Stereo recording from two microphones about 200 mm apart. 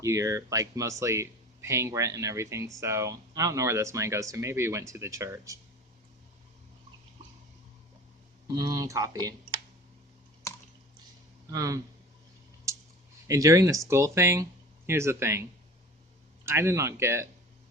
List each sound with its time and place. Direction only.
0.0 s speech: 15° right (ahead or behind)
8.4 s speech: 20° right (ahead or behind)
11.5 s speech: 15° right (ahead or behind)
13.2 s speech: 15° right (ahead or behind)
16.5 s speech: 15° right (ahead or behind)